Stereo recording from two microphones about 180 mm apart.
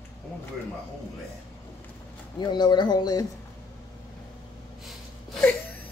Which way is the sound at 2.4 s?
25° left (ahead or behind).